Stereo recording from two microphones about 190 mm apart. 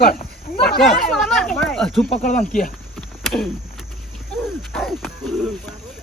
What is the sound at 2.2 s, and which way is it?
Speech, 40° left (ahead or behind).